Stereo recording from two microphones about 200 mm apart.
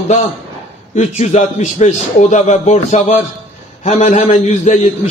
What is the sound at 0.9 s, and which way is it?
A man's voice, 35° left (ahead or behind).